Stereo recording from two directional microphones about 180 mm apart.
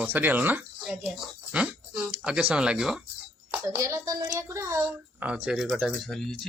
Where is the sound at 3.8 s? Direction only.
20° right (ahead or behind).